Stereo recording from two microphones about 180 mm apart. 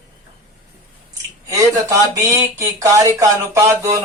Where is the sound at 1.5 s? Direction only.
20° right (ahead or behind).